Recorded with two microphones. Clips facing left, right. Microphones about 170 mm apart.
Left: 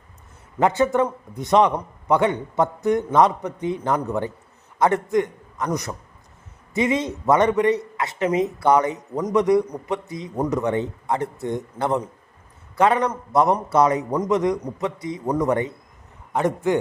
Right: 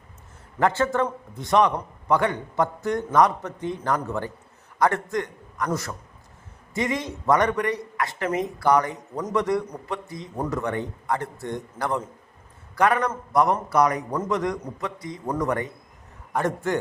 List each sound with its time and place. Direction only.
0.6 s a man's voice: 20° left (ahead or behind)